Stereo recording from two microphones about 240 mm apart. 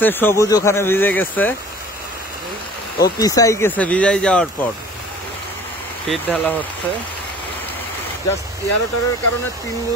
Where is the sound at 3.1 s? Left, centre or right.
Centre.